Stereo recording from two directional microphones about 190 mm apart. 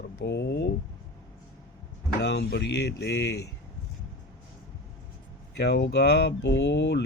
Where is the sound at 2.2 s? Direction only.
65° left (ahead or behind).